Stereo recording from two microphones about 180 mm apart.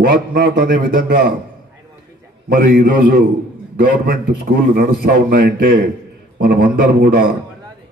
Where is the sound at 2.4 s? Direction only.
55° right (ahead or behind).